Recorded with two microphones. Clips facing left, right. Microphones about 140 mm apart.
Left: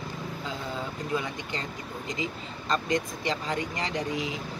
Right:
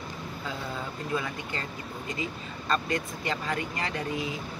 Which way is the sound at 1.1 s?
20° left (ahead or behind).